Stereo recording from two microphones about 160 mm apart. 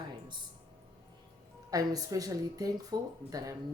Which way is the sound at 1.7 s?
20° right (ahead or behind).